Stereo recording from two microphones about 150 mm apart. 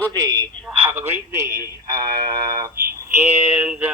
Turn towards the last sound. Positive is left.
turn(degrees=-10)  # may be behind; listen again after turning